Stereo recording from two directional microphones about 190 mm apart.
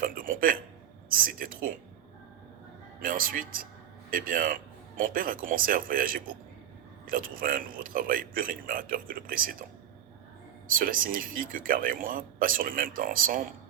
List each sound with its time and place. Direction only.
0.0 s a sound: 45° right (ahead or behind)
1.1 s a man's voice: 50° right (ahead or behind)
3.0 s a man's voice: 45° right (ahead or behind)
10.8 s a man's voice: 50° right (ahead or behind)